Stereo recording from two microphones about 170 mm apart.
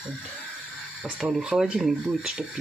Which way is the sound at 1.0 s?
5° right (ahead or behind).